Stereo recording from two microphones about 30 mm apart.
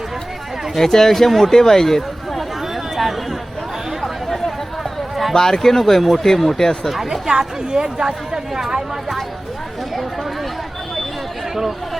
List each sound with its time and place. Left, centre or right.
0.8 s speech: centre
2.9 s a sound: centre
4.0 s chatter: centre
5.3 s speech: centre
6.8 s speech: centre
7.1 s speech: right